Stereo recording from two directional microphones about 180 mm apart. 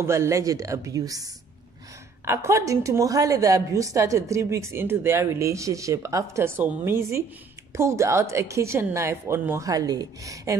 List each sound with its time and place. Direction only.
0.0 s a woman's voice: 15° right (ahead or behind)